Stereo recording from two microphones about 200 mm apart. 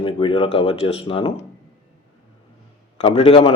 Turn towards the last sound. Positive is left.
turn(degrees=25)  # may be behind; listen again after turning